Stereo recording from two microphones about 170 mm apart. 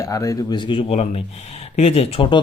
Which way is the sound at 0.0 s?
20° left (ahead or behind).